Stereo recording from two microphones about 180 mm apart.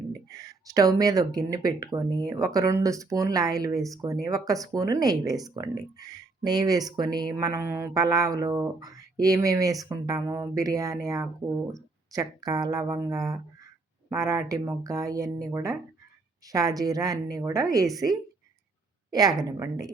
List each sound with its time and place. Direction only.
0.1 s speech: 20° right (ahead or behind)
19.1 s speech: 20° right (ahead or behind)